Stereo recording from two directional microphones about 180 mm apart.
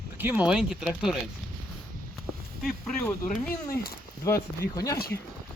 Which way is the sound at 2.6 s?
5° left (ahead or behind).